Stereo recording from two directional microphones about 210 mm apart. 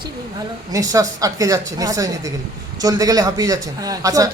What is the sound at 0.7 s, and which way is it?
A man's voice, 15° right (ahead or behind).